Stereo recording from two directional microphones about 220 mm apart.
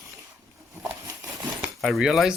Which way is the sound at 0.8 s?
10° right (ahead or behind).